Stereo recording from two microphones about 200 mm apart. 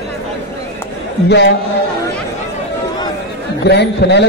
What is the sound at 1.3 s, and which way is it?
Speech, 60° left (ahead or behind).